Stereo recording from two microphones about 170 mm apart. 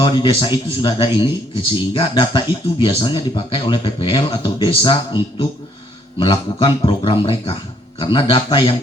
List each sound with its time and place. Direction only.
0.0 s speech: 30° left (ahead or behind)